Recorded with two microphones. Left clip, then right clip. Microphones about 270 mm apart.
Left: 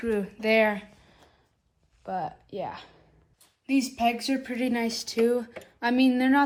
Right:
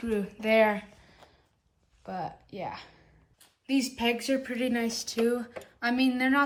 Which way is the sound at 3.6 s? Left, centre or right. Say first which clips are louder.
Left 3 dB; centre.